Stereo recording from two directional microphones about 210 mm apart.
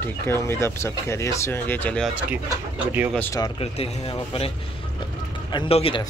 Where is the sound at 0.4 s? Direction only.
10° left (ahead or behind).